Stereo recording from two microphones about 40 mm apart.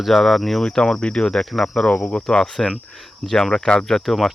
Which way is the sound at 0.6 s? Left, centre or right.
Centre.